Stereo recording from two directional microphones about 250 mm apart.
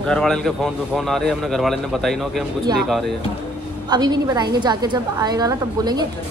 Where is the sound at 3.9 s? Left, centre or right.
Centre.